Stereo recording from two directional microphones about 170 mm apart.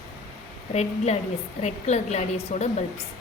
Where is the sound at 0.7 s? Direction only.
40° left (ahead or behind).